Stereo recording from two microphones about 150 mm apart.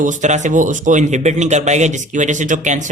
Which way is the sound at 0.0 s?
55° right (ahead or behind).